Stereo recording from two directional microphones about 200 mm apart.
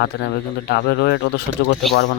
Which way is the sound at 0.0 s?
55° left (ahead or behind).